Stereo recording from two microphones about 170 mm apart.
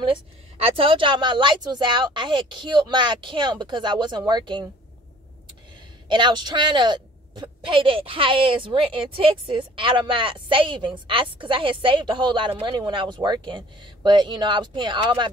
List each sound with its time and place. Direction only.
0.6 s a woman's voice: 35° right (ahead or behind)
6.0 s a man's voice: 25° right (ahead or behind)